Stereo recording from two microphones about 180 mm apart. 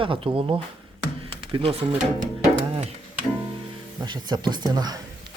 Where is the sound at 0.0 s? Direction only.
30° right (ahead or behind).